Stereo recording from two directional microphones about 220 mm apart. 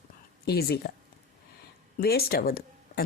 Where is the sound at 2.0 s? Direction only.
45° left (ahead or behind).